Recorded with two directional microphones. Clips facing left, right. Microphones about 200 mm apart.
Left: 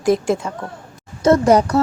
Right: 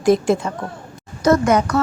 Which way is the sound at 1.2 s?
35° left (ahead or behind).